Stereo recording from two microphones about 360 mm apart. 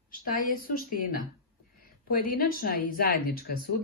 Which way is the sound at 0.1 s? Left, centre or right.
Left.